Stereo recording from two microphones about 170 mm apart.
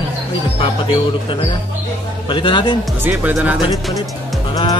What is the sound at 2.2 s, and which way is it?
Speech, 30° left (ahead or behind).